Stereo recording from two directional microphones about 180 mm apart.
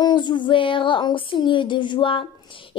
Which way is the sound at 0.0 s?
25° left (ahead or behind).